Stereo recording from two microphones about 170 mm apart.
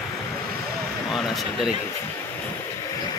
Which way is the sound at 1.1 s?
Centre (ahead or behind).